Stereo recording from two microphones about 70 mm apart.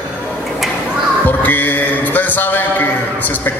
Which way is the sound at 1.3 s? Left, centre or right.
Left.